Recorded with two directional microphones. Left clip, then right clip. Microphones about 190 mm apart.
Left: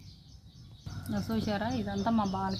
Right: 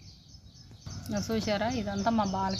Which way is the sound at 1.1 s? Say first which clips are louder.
Right 3 dB; centre (ahead or behind).